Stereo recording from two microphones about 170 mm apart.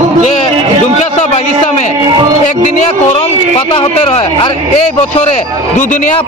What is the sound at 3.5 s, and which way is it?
A man's voice, 30° left (ahead or behind).